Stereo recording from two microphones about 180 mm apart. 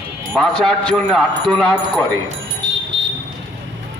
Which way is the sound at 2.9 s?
90° right.